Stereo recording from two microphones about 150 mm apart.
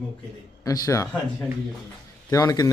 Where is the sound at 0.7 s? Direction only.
20° left (ahead or behind).